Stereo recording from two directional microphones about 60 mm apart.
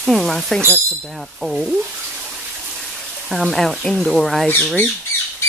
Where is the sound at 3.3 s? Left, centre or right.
Centre.